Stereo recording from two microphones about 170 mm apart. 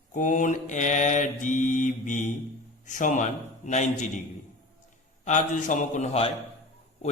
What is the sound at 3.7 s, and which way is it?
Mantra, 45° left (ahead or behind).